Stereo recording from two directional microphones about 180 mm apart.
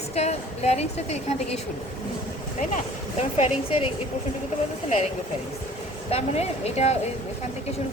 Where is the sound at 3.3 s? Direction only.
35° left (ahead or behind).